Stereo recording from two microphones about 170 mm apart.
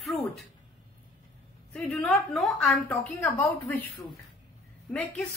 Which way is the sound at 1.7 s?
Centre (ahead or behind).